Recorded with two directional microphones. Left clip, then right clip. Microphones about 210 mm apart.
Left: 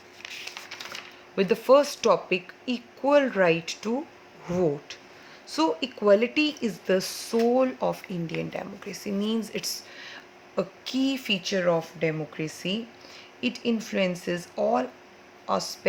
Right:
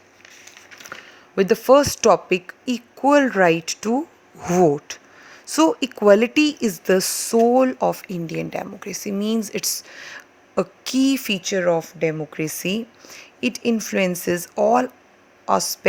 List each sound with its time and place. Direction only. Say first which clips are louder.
1.4 s speech: right 5 dB; 40° right (ahead or behind)
4.9 s a sound: right 7 dB; 50° right (ahead or behind)
5.5 s speech: right 7 dB; 50° right (ahead or behind)